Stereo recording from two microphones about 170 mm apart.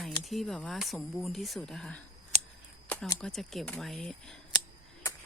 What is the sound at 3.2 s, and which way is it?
Speech, 5° left (ahead or behind).